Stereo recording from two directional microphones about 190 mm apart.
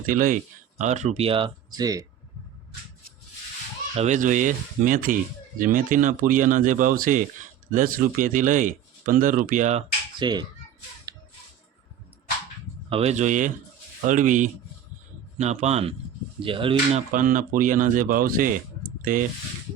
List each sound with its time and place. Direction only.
0.0 s speech: 45° right (ahead or behind); by 2.0 s 20° right (ahead or behind)
3.9 s speech: 40° right (ahead or behind)
10.2 s speech: 20° right (ahead or behind)
12.9 s speech: 35° right (ahead or behind)
17.1 s speech: 45° right (ahead or behind)